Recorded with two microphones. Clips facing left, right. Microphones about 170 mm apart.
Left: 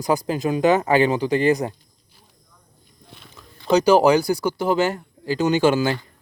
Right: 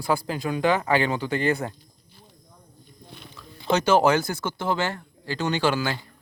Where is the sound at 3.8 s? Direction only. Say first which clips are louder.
Left 4 dB; 10° left (ahead or behind).